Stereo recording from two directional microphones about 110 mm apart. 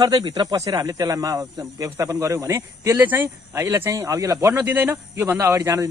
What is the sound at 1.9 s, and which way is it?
Speech, 25° right (ahead or behind).